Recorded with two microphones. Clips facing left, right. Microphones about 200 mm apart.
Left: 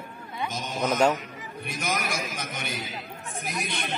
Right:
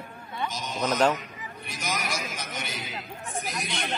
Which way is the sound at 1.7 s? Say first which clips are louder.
Left 2 dB; 55° left (ahead or behind).